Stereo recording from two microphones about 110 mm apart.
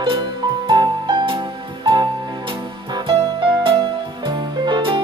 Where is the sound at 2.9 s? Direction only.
50° right (ahead or behind).